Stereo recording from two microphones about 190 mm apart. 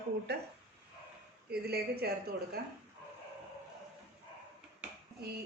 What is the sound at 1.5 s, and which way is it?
Speech, 55° right (ahead or behind).